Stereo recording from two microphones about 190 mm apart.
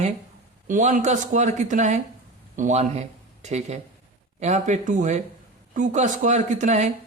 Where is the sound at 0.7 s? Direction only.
40° right (ahead or behind).